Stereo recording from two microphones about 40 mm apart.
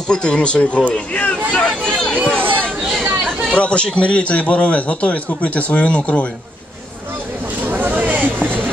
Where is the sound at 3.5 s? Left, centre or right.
Left.